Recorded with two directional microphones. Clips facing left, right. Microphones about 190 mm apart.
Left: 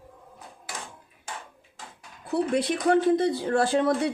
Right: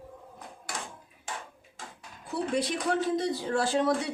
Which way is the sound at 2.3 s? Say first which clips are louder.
Left 5 dB; 60° left (ahead or behind).